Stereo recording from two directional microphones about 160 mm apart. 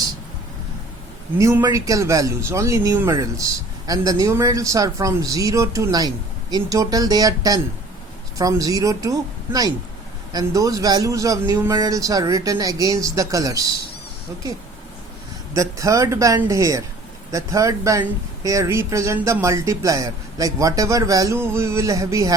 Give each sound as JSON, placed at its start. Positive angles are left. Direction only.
{"t": 1.4, "sound": "speech", "side_deg": -20}
{"t": 15.5, "sound": "speech", "side_deg": -20}